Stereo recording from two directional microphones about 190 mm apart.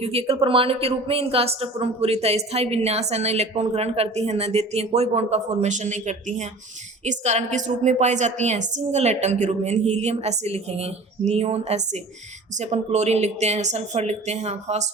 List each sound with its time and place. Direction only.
0.0 s speech: 30° right (ahead or behind)